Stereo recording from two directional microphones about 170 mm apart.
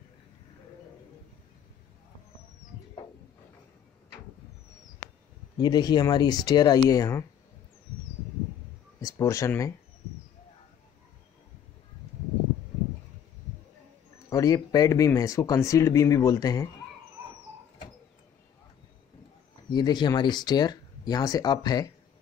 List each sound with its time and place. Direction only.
5.6 s speech: 25° left (ahead or behind)
9.0 s speech: 20° left (ahead or behind)
14.3 s speech: 20° left (ahead or behind)
19.7 s speech: 25° left (ahead or behind)